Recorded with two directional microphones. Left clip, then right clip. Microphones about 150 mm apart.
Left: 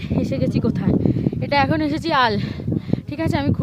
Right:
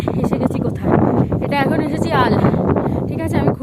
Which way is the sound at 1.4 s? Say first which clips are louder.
Right 1 dB; 15° left (ahead or behind).